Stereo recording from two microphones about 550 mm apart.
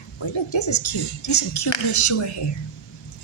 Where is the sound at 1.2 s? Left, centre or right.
Left.